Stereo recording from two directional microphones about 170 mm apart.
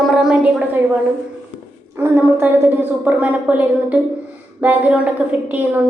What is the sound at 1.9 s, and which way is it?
A woman's voice, 15° right (ahead or behind).